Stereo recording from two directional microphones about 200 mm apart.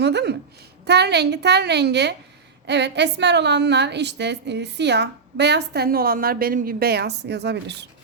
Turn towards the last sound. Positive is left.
turn(degrees=-60)  # may be behind; listen again after turning